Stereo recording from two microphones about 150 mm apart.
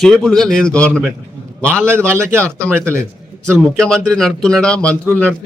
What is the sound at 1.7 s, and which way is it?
A man's voice, 15° right (ahead or behind).